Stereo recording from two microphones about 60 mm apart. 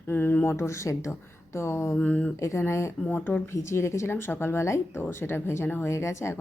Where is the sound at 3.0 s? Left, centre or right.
Left.